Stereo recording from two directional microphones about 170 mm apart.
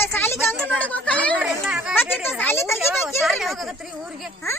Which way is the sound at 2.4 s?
15° left (ahead or behind).